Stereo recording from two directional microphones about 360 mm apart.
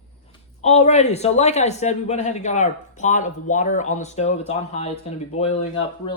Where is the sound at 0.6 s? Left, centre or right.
Centre.